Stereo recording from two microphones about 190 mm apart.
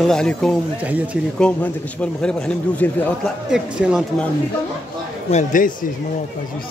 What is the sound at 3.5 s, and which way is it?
Speech, 5° right (ahead or behind).